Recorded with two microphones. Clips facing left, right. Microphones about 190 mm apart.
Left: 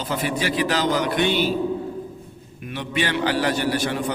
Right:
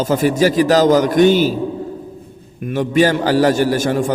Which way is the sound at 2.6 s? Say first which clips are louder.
Right 12 dB; 45° right (ahead or behind).